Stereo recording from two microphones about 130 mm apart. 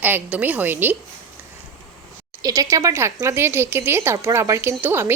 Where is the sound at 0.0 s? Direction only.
15° right (ahead or behind).